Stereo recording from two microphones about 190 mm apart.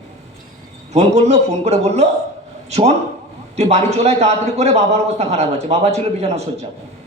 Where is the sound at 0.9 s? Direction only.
35° right (ahead or behind).